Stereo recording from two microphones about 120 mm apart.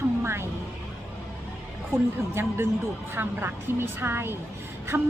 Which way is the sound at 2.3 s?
20° right (ahead or behind).